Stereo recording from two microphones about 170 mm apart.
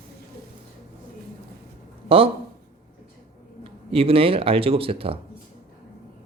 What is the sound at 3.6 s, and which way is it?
Speech, 35° right (ahead or behind).